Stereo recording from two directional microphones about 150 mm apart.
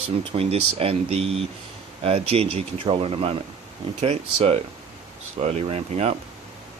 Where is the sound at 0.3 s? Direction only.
40° right (ahead or behind).